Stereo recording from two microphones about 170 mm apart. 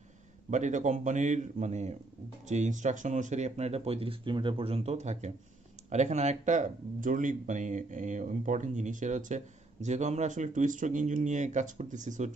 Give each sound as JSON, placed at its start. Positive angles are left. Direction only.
{"t": 0.5, "sound": "speech", "side_deg": -45}